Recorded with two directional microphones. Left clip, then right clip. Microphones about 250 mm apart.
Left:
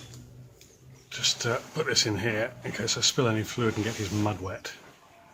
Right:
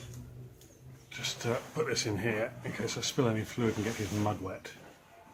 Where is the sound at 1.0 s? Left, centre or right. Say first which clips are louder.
Left 7 dB; left.